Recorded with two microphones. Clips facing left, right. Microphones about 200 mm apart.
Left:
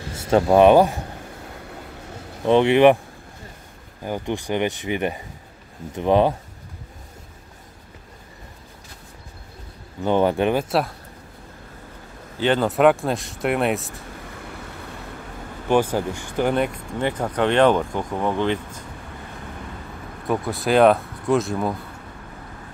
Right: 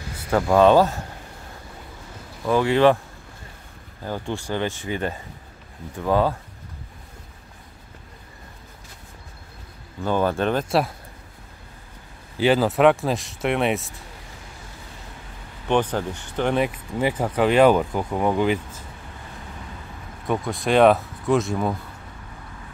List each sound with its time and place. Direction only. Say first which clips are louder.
0.1 s speech: left 3 dB; 25° left (ahead or behind)
2.4 s speech: left 3 dB; 25° left (ahead or behind)
4.0 s speech: left 3 dB; 15° left (ahead or behind)
10.0 s speech: left 3 dB; 20° left (ahead or behind)
12.4 s speech: right 1 dB; 5° right (ahead or behind)
14.5 s vehicle: left 7 dB; 65° left (ahead or behind)
15.7 s speech: left 2 dB; 10° left (ahead or behind); by 18.8 s 10° right (ahead or behind)
20.2 s speech: left 1 dB; centre (ahead or behind)